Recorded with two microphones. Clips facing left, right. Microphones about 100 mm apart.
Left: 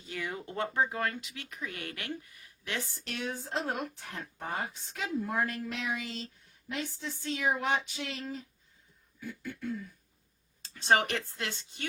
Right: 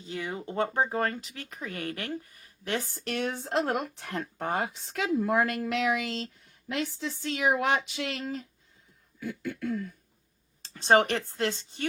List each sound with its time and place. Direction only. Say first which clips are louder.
0.0 s speech: right 3 dB; 20° right (ahead or behind); by 8.4 s 80° right
9.2 s a sound: right 5 dB; 85° right
10.8 s speech: right 5 dB; 35° right (ahead or behind)